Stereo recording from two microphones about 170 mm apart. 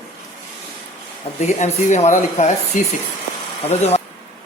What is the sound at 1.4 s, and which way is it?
Speech, 45° left (ahead or behind).